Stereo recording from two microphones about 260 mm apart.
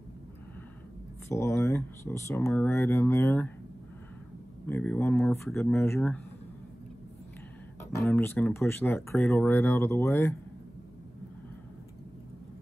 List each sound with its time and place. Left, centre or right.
1.3 s speech: centre
4.6 s speech: centre
7.9 s speech: centre